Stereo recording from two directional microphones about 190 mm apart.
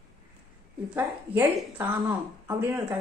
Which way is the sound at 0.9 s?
10° right (ahead or behind).